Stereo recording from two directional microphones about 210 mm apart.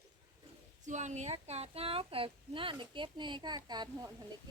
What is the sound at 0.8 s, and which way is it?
A woman's voice, 35° right (ahead or behind).